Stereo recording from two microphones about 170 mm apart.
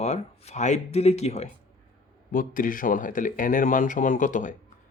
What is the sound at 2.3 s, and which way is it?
Speech, 55° left (ahead or behind).